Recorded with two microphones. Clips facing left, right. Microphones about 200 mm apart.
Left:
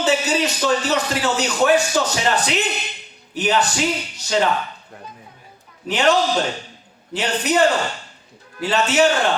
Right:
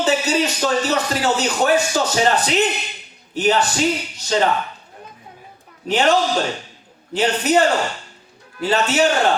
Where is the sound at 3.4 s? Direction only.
40° right (ahead or behind).